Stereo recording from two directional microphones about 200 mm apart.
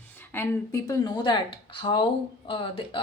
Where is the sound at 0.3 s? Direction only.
15° left (ahead or behind).